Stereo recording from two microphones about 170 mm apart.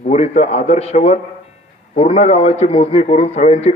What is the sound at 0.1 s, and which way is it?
A man's voice, 40° left (ahead or behind).